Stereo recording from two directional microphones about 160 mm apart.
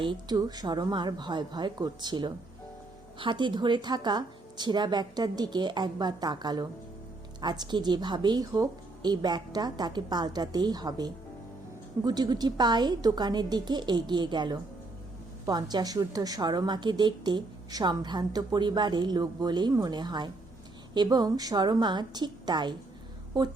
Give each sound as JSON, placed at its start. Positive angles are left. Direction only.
{"t": 0.0, "sound": "a woman's voice", "side_deg": -30}